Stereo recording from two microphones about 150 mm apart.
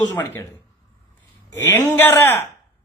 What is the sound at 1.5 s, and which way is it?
Speech, 15° left (ahead or behind).